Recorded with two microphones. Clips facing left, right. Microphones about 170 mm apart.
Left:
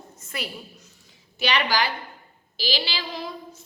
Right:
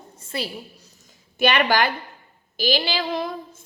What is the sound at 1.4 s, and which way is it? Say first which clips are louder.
A woman's voice: right 5 dB; 50° right (ahead or behind).